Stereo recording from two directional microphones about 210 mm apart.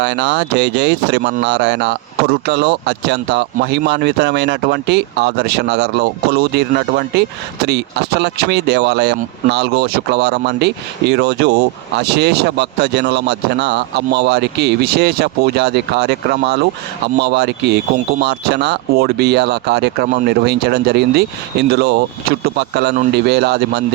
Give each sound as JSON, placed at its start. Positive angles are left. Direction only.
{"t": 0.0, "sound": "speech", "side_deg": -55}